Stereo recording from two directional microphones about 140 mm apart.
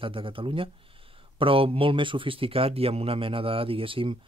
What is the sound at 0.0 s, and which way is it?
Speech, 40° right (ahead or behind).